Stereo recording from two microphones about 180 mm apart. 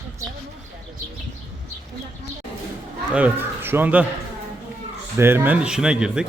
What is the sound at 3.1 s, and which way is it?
Speech, 10° right (ahead or behind).